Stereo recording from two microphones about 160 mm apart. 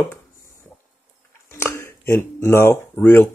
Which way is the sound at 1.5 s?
15° left (ahead or behind).